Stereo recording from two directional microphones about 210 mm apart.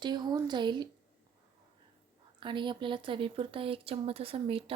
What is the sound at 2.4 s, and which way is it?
Speech, 20° right (ahead or behind).